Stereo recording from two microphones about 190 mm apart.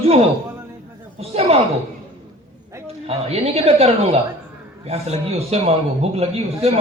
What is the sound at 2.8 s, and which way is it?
A woman's voice, 30° right (ahead or behind).